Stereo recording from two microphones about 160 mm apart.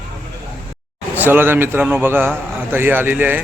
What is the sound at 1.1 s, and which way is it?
A man's voice, 10° right (ahead or behind).